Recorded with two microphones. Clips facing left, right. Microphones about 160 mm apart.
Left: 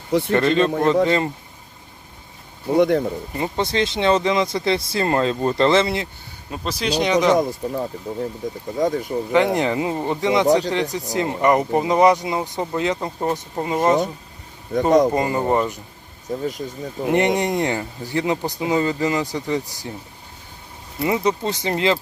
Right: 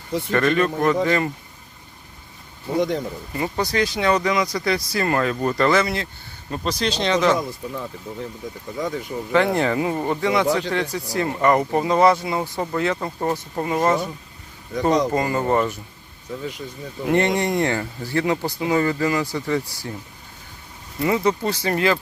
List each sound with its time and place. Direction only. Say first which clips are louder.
0.3 s speech: even; 20° left (ahead or behind)
2.7 s speech: left 5 dB; 60° left (ahead or behind)
3.3 s speech: even; 25° left (ahead or behind)
6.5 s speech: even; 5° left (ahead or behind)
7.3 s speech: left 6 dB; 40° left (ahead or behind)
9.3 s speech: even; 20° left (ahead or behind)
15.1 s speech: left 1 dB; 20° left (ahead or behind)
16.3 s speech: left 5 dB; 40° left (ahead or behind)
17.1 s speech: left 1 dB; 20° left (ahead or behind)
21.0 s speech: even; 20° left (ahead or behind)